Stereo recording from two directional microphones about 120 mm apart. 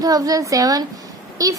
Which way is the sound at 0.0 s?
30° right (ahead or behind).